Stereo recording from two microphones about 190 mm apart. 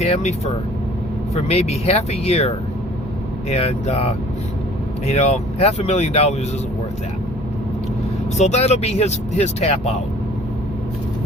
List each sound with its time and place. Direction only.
0.0 s speech: 35° left (ahead or behind)
1.4 s speech: 35° left (ahead or behind)
3.5 s speech: 35° left (ahead or behind)
8.4 s speech: 35° left (ahead or behind)